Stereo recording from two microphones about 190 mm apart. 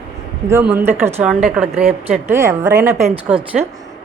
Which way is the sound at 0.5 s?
10° right (ahead or behind).